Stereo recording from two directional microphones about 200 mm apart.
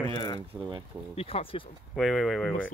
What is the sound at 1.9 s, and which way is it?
Speech, centre (ahead or behind).